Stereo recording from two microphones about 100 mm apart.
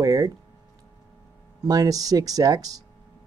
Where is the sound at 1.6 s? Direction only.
40° right (ahead or behind).